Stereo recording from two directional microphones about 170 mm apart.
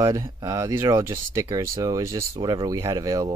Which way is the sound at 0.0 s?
20° right (ahead or behind).